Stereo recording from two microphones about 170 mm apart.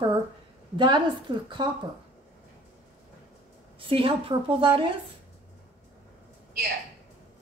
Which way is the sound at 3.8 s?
30° right (ahead or behind).